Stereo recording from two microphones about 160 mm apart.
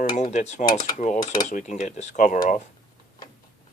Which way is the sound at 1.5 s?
50° left (ahead or behind).